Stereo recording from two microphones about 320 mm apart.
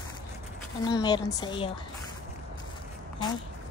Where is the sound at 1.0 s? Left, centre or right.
Centre.